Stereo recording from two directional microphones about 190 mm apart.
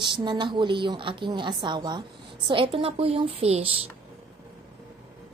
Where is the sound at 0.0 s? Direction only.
25° right (ahead or behind).